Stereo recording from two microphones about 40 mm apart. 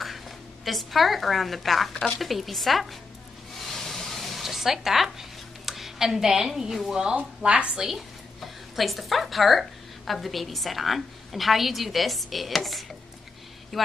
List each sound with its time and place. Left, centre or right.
0.7 s a woman's voice: centre
3.5 s a sound: centre
5.7 s speech: centre
6.9 s a woman's voice: centre
7.2 s speech: right
7.7 s a woman's voice: centre
8.4 s a woman's voice: centre